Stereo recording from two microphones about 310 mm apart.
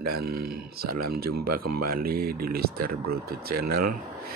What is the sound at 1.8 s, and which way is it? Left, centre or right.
Speech, right.